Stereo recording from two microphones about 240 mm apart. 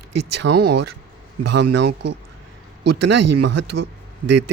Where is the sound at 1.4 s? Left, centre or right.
Right.